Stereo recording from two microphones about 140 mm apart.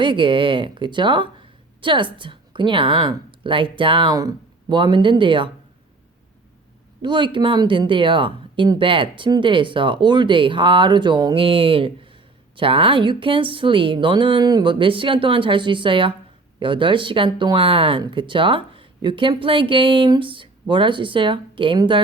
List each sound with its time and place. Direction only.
0.0 s speech: 35° right (ahead or behind)
7.0 s speech: 35° right (ahead or behind)